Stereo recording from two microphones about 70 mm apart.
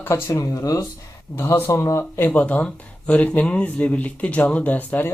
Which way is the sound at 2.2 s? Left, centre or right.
Left.